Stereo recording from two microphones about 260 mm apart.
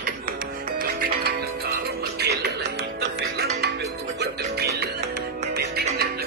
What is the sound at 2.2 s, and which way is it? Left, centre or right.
Music, right.